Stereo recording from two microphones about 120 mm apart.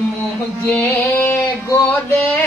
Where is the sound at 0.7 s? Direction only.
15° left (ahead or behind).